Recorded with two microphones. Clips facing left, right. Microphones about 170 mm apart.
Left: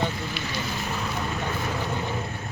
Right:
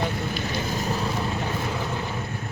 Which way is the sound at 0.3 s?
40° right (ahead or behind).